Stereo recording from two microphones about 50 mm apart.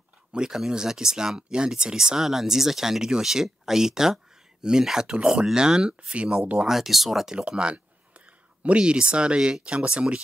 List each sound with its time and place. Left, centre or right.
0.3 s speech: centre
6.6 s speech: centre
7.3 s a sound: right
8.6 s speech: right